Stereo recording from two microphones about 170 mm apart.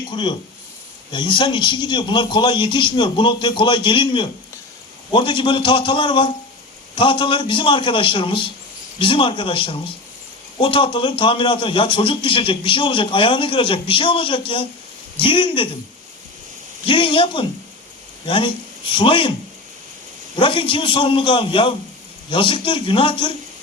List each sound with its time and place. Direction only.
0.1 s a man's voice: 30° left (ahead or behind)
16.8 s a man's voice: 30° left (ahead or behind)
20.3 s a man's voice: 30° left (ahead or behind)